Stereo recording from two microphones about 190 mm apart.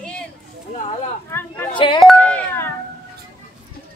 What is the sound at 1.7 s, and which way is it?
Speech, 25° left (ahead or behind).